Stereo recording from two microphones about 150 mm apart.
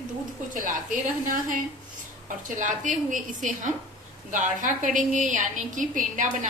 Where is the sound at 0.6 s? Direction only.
65° right (ahead or behind).